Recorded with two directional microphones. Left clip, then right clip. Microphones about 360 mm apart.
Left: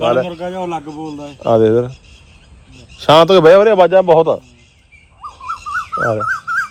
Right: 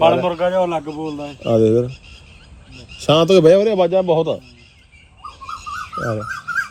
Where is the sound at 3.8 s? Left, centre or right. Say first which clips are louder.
Left 6 dB; centre.